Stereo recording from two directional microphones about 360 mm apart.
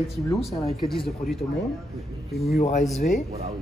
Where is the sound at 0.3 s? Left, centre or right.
Centre.